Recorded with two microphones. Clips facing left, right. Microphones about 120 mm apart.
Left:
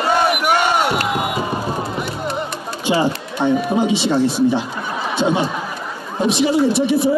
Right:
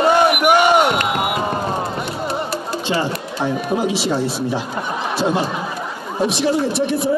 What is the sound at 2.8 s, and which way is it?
Music, 15° left (ahead or behind).